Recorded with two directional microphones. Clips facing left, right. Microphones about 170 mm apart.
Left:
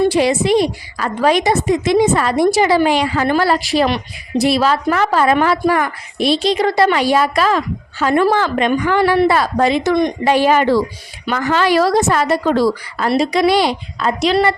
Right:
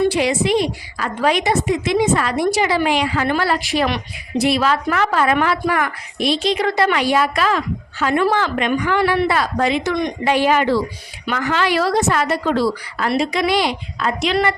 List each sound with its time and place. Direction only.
0.1 s a woman's voice: 35° left (ahead or behind)